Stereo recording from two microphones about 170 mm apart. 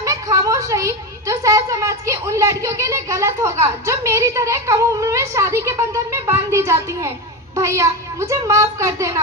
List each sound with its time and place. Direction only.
0.0 s a woman's voice: 20° right (ahead or behind)